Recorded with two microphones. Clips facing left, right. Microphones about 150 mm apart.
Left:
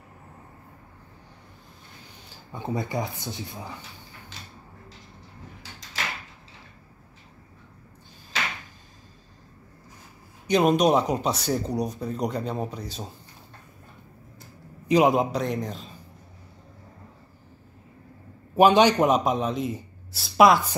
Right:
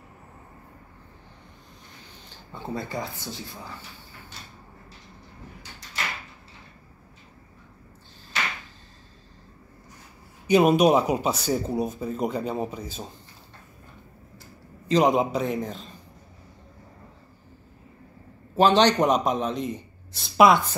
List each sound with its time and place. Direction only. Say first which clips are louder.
2.2 s speech: left 3 dB; 10° left (ahead or behind)
10.4 s speech: right 2 dB; 5° right (ahead or behind)
14.9 s speech: left 1 dB; 5° left (ahead or behind)
18.6 s speech: left 1 dB; 10° left (ahead or behind)